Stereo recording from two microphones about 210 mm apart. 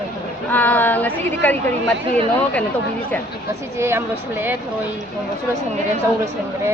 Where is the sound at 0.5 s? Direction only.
10° left (ahead or behind).